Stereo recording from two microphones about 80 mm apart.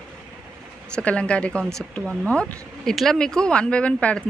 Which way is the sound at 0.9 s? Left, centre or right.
Centre.